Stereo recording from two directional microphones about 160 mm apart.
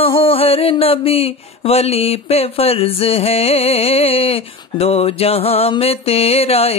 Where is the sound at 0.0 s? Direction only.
35° left (ahead or behind).